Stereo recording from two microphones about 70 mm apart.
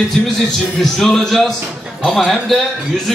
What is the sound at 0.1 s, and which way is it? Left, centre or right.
A man's voice, centre.